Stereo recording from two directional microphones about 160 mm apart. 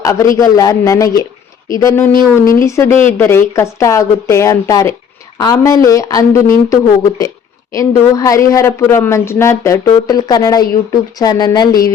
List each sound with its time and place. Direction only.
0.0 s a man's voice: 20° left (ahead or behind)